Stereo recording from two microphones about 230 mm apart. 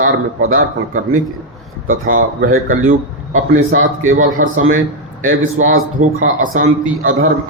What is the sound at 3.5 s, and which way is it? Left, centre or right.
Speech, right.